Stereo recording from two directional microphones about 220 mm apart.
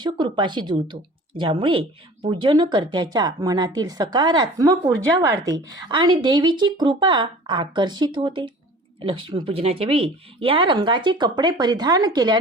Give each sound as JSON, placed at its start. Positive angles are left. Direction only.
{"t": 0.0, "sound": "speech", "side_deg": -20}